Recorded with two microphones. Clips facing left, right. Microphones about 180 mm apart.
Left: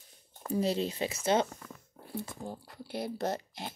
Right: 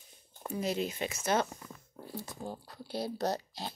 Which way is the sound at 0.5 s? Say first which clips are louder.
Left 3 dB; 30° left (ahead or behind).